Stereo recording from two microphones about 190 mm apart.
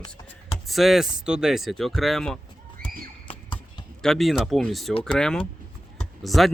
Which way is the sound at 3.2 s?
25° left (ahead or behind).